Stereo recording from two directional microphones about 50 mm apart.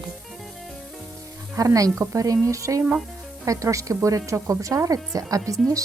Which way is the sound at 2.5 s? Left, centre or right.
Right.